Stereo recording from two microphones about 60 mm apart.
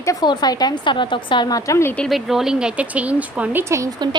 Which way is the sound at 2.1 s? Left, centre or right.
Centre.